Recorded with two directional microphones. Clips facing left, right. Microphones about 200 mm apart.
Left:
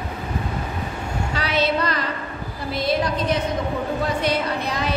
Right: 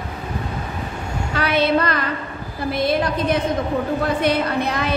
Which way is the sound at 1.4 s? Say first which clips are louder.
Right 4 dB; 55° right (ahead or behind).